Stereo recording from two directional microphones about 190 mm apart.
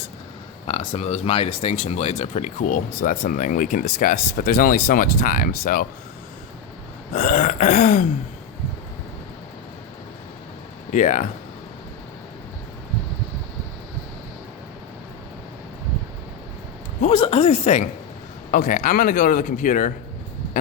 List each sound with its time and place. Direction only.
0.7 s speech: 30° left (ahead or behind); by 5.8 s 50° left (ahead or behind)
7.1 s speech: 40° left (ahead or behind)
10.9 s speech: 40° left (ahead or behind)
17.0 s speech: 30° left (ahead or behind)
18.5 s speech: 45° left (ahead or behind)